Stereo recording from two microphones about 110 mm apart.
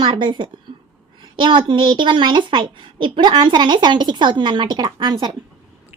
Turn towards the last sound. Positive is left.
turn(degrees=-40)  # may be behind; listen again after turning